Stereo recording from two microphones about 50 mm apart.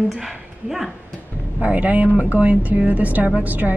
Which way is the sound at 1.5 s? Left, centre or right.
Right.